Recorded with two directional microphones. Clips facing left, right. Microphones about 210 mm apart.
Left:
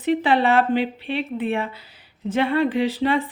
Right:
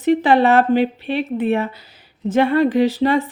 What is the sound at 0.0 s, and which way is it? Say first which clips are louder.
A woman's voice: right 5 dB; 45° right (ahead or behind).